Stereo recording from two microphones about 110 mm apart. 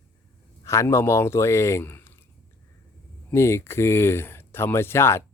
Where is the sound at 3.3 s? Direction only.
25° left (ahead or behind).